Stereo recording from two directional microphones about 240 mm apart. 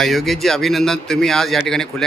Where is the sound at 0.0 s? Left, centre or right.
Centre.